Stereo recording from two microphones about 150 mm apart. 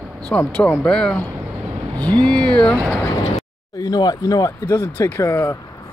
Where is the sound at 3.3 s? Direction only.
25° left (ahead or behind).